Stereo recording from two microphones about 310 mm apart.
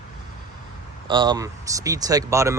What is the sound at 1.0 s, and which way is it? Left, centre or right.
Speech, centre.